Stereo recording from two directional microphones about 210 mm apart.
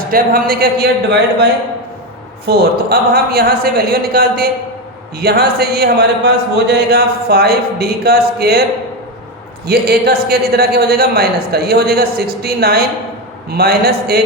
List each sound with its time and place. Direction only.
0.1 s a man's voice: 45° right (ahead or behind)
2.5 s a man's voice: 45° right (ahead or behind)
9.6 s a man's voice: 50° right (ahead or behind)